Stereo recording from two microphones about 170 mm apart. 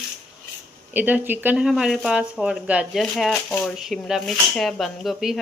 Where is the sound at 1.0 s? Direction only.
10° right (ahead or behind).